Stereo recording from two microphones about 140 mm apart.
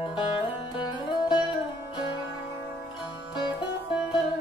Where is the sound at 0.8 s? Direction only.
35° left (ahead or behind).